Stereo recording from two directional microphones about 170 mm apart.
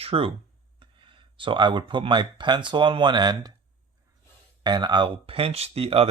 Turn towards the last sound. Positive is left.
turn(degrees=-35)  # may be behind; listen again after turning